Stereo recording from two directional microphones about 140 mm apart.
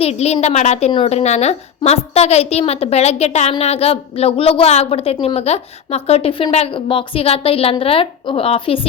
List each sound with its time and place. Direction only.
0.0 s a woman's voice: 50° left (ahead or behind)